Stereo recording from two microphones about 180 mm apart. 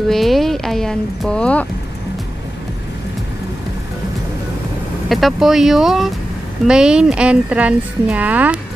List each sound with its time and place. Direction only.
0.1 s speech: centre (ahead or behind)
5.1 s speech: centre (ahead or behind)